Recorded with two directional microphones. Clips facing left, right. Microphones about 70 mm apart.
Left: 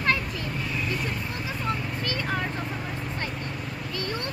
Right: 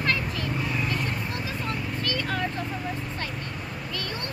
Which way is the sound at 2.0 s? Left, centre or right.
Left.